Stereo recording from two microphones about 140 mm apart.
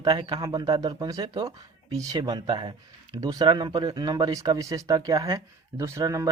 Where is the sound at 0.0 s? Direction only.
30° right (ahead or behind).